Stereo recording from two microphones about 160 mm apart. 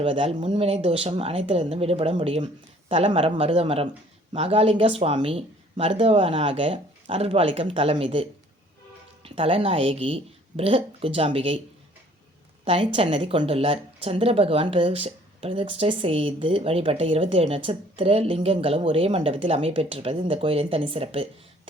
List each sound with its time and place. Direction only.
0.0 s a woman's voice: 35° right (ahead or behind)
12.6 s a woman's voice: 35° right (ahead or behind)